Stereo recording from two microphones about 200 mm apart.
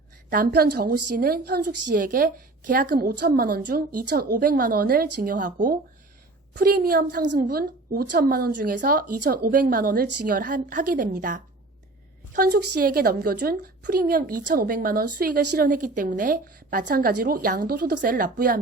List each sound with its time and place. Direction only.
0.3 s a woman's voice: 50° right (ahead or behind)